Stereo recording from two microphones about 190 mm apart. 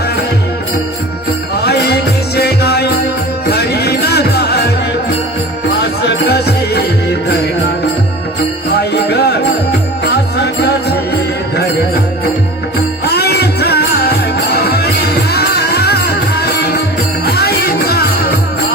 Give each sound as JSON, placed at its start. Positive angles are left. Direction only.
{"t": 1.6, "sound": "music", "side_deg": 60}
{"t": 5.8, "sound": "music", "side_deg": 60}
{"t": 8.7, "sound": "music", "side_deg": 60}
{"t": 13.1, "sound": "music", "side_deg": 55}